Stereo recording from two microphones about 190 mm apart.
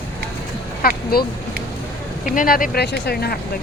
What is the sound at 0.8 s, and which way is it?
Speech, 50° left (ahead or behind).